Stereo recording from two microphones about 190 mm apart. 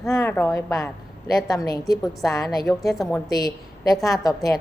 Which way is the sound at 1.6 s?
20° left (ahead or behind).